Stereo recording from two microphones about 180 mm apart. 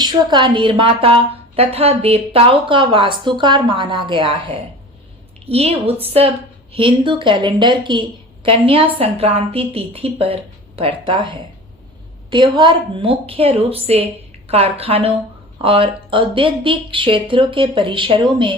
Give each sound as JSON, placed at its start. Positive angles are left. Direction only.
{"t": 0.0, "sound": "a woman's voice", "side_deg": -25}